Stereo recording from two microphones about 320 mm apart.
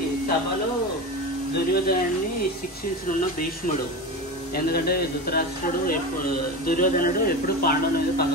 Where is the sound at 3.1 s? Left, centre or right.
Left.